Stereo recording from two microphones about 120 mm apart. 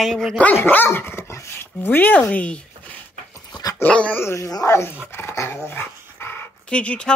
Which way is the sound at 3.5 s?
30° left (ahead or behind).